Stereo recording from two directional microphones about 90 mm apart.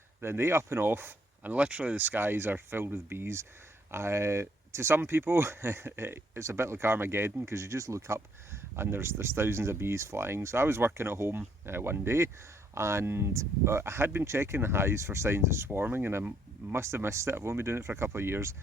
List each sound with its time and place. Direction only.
0.2 s speech: 25° right (ahead or behind)